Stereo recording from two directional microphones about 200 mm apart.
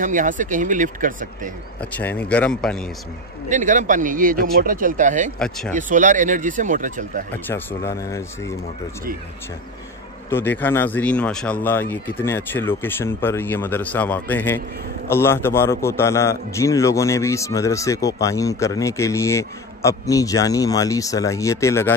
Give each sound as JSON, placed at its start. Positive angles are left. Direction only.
{"t": 0.0, "sound": "speech", "side_deg": -40}
{"t": 1.8, "sound": "a man's voice", "side_deg": 10}
{"t": 3.4, "sound": "speech", "side_deg": -40}
{"t": 5.4, "sound": "speech", "side_deg": 5}
{"t": 5.8, "sound": "speech", "side_deg": -40}
{"t": 7.4, "sound": "a man's voice", "side_deg": 10}
{"t": 10.3, "sound": "a man's voice", "side_deg": 10}